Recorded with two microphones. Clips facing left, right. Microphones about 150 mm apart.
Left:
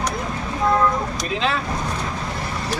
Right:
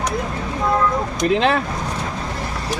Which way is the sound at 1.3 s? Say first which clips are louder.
Right 7 dB; 60° right (ahead or behind).